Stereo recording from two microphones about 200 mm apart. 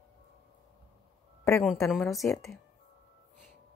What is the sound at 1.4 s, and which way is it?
Speech, 5° left (ahead or behind).